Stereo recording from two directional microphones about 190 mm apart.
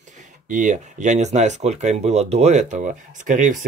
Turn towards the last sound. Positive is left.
turn(degrees=-40)  # may be behind; listen again after turning